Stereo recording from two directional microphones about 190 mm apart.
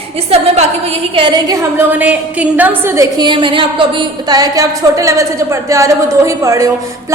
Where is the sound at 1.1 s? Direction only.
25° right (ahead or behind).